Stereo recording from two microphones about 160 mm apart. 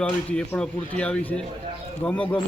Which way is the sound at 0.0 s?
10° left (ahead or behind).